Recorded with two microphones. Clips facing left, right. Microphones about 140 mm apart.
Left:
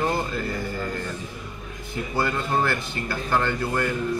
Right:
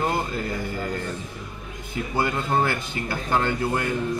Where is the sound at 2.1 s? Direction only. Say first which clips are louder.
Right 1 dB; 20° right (ahead or behind).